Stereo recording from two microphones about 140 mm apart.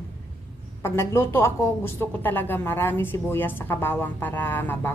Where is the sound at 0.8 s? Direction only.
20° left (ahead or behind).